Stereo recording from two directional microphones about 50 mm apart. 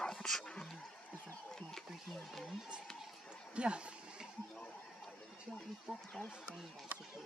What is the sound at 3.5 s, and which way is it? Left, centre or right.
Speech, right.